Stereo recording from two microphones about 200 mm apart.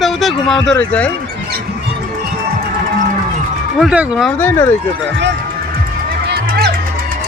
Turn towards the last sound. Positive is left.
turn(degrees=-55)  # may be behind; listen again after turning